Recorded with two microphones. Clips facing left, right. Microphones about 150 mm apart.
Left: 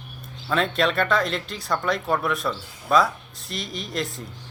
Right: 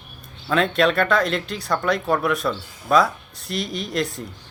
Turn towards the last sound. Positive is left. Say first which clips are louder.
# right 4 dB
turn(degrees=0)  # may be behind; listen again after turning